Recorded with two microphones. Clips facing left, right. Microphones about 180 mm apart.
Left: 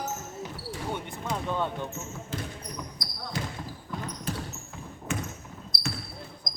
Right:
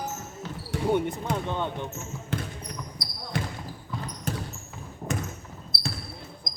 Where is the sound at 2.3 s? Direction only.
65° right (ahead or behind).